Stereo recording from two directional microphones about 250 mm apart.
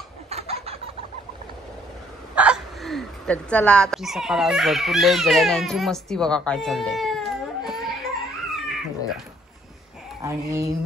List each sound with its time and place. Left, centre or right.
0.3 s chicken: right
2.3 s speech: centre
8.5 s cat: centre
10.2 s speech: centre